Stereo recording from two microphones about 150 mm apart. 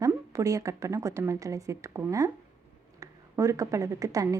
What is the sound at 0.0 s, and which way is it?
A woman's voice, 20° right (ahead or behind).